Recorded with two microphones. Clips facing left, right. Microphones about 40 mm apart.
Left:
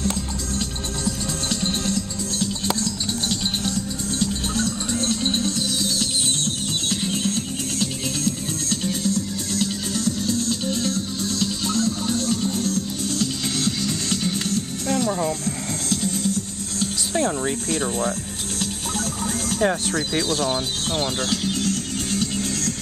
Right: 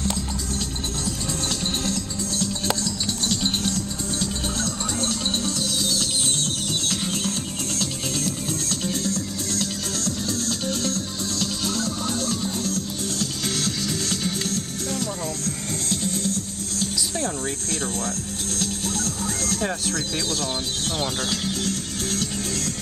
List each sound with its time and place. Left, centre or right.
4.6 s music: left
9.5 s music: left
13.2 s music: left
15.0 s music: left
17.2 s speech: left
18.6 s music: left